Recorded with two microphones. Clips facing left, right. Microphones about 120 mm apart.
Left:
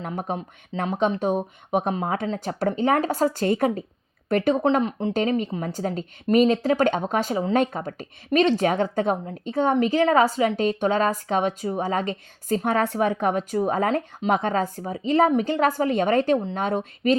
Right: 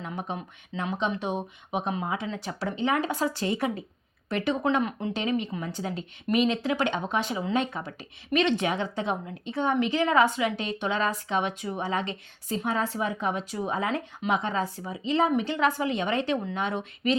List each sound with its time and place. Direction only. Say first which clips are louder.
0.0 s a woman's voice: left 5 dB; 45° left (ahead or behind)
4.6 s speech: left 5 dB; 30° left (ahead or behind)
5.1 s a woman's voice: left 6 dB; 40° left (ahead or behind)
12.6 s a woman's voice: left 6 dB; 60° left (ahead or behind); by 17.2 s 40° left (ahead or behind)